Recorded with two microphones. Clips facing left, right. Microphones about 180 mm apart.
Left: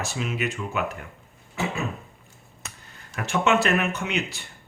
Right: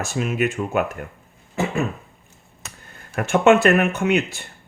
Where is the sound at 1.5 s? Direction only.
50° right (ahead or behind).